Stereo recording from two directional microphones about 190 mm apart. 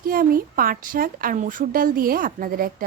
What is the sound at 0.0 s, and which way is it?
Speech, 50° right (ahead or behind).